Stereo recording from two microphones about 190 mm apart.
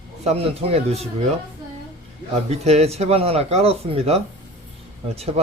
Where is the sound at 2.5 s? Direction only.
35° right (ahead or behind).